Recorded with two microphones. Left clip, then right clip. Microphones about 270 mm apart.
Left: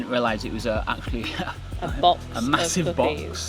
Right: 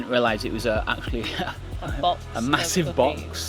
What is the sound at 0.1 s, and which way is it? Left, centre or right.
Speech, right.